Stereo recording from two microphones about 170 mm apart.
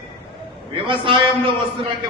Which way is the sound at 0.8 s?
30° right (ahead or behind).